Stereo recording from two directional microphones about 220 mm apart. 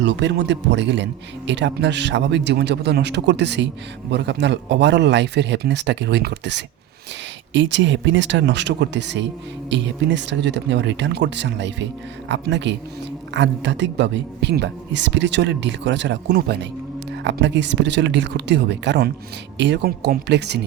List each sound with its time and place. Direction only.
0.0 s speech: 55° right (ahead or behind)